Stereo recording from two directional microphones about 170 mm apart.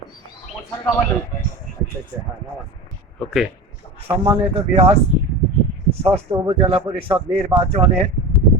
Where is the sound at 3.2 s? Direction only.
Centre (ahead or behind).